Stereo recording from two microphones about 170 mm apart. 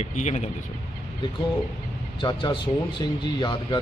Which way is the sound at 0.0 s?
40° left (ahead or behind).